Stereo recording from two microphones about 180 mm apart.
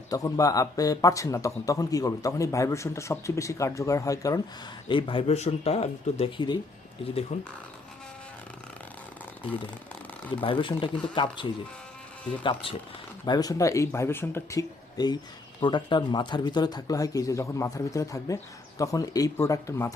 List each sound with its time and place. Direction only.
0.1 s speech: 20° left (ahead or behind)
10.4 s speech: 30° left (ahead or behind)